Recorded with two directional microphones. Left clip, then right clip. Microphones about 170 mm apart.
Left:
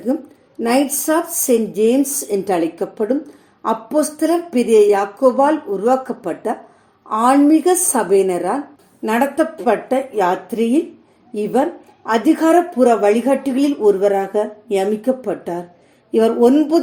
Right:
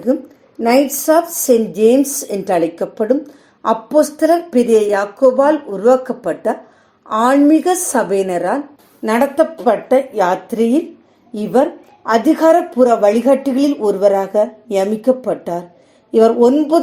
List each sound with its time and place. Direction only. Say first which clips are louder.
0.6 s a woman's voice: right 4 dB; 20° right (ahead or behind)
12.0 s a woman's voice: right 4 dB; 15° right (ahead or behind)